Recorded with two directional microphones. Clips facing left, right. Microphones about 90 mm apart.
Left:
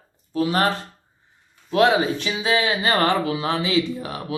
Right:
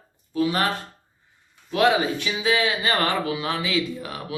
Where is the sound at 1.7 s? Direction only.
35° left (ahead or behind).